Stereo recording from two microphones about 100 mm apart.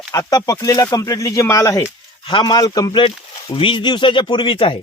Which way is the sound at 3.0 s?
60° left (ahead or behind).